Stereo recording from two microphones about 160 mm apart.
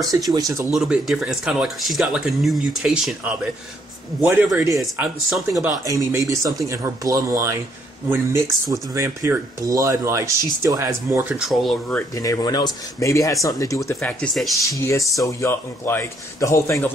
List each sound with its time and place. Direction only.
0.0 s speech: 25° right (ahead or behind)
0.7 s speech: 5° right (ahead or behind)
5.9 s speech: 20° right (ahead or behind)
11.2 s speech: centre (ahead or behind)
12.1 s speech: 20° left (ahead or behind)
13.9 s speech: 5° left (ahead or behind)
15.2 s a man's voice: 15° left (ahead or behind)